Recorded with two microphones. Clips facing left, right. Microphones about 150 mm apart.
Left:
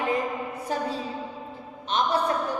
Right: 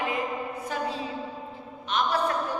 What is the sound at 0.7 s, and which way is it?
Speech, 35° left (ahead or behind).